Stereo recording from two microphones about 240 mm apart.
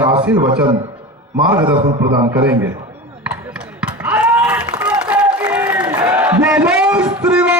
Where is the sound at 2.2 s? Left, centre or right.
Centre.